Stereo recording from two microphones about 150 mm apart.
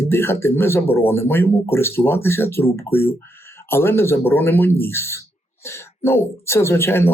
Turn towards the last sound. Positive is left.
turn(degrees=15)  # may be behind; listen again after turning